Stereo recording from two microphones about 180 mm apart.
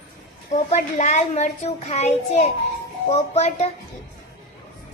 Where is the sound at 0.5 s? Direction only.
40° left (ahead or behind).